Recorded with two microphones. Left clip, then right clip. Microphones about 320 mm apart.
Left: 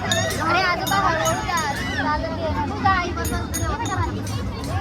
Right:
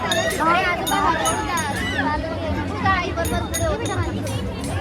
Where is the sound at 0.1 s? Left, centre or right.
Left.